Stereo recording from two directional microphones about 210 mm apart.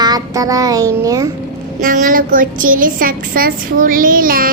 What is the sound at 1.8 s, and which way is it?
A woman's voice, 40° right (ahead or behind).